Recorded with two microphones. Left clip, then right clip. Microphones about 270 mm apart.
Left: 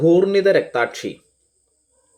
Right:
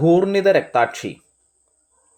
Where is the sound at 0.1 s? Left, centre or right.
Centre.